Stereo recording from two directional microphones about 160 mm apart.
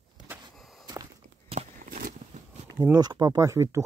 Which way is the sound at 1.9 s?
65° right (ahead or behind).